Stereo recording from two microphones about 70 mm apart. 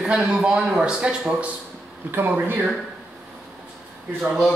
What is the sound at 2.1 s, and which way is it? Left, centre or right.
Speech, right.